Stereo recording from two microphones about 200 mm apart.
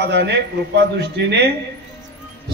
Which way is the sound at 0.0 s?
60° right (ahead or behind).